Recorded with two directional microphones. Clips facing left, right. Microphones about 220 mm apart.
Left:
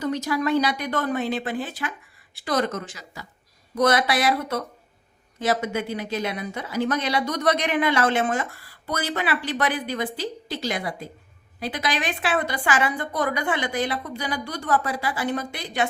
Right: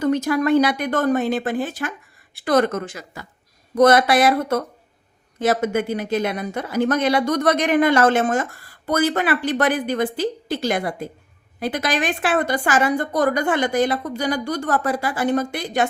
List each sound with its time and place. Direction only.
0.0 s speech: 55° right (ahead or behind)